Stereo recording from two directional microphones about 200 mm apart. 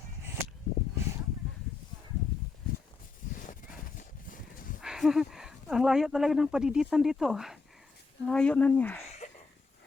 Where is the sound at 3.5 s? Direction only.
40° left (ahead or behind).